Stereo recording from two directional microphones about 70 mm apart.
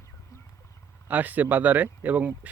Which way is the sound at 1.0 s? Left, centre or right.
Right.